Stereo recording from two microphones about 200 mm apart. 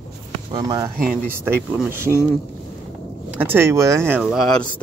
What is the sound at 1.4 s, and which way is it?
Speech, 10° right (ahead or behind).